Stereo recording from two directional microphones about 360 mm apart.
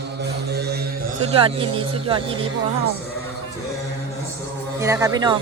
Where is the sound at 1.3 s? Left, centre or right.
Centre.